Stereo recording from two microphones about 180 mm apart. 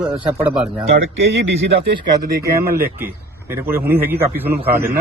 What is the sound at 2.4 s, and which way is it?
A man's voice, 15° right (ahead or behind).